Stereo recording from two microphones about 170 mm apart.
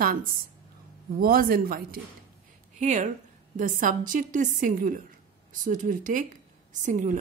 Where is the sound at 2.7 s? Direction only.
45° right (ahead or behind).